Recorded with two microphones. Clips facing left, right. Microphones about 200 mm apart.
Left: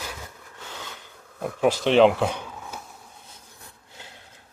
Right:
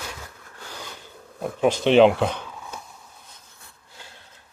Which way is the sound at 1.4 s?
5° left (ahead or behind).